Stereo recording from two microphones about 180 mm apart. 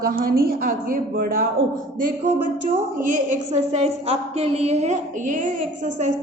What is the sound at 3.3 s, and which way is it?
A woman's voice, 35° right (ahead or behind).